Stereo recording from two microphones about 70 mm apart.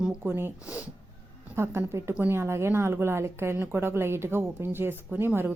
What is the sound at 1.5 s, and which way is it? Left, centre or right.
A woman's voice, right.